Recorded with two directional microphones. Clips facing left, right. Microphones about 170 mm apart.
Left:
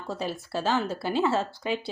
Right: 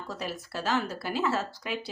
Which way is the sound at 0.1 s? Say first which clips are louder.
Left 6 dB; 30° left (ahead or behind).